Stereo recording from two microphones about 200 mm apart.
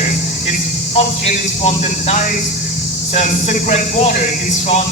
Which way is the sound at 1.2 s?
35° left (ahead or behind).